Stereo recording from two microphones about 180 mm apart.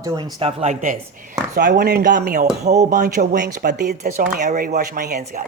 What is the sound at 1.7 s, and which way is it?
Speech, 60° right (ahead or behind).